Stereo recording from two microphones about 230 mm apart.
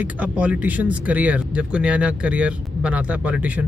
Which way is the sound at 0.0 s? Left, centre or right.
Centre.